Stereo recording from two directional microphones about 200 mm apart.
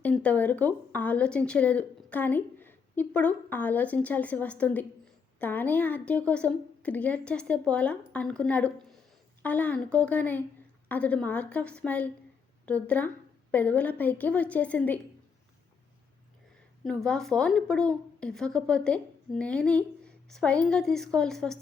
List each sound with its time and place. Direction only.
0.0 s a woman's voice: 5° left (ahead or behind)
16.8 s a woman's voice: 5° left (ahead or behind)